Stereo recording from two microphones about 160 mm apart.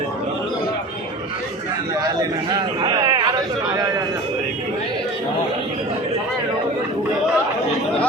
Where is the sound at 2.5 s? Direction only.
25° right (ahead or behind).